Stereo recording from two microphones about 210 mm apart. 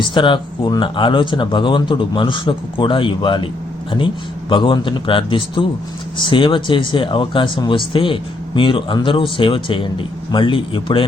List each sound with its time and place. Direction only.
0.0 s speech: 20° left (ahead or behind)